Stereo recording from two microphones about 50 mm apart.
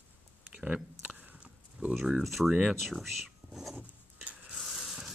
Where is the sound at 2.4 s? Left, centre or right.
Centre.